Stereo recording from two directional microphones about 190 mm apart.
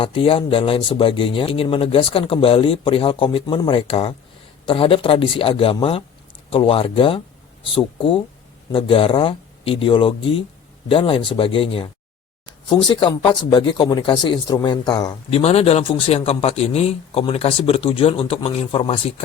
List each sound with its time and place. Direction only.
0.0 s speech: 30° left (ahead or behind)
15.4 s speech: 30° left (ahead or behind)